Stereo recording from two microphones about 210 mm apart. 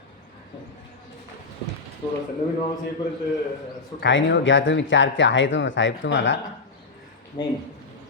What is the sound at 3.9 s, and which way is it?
A woman's voice, 60° left (ahead or behind).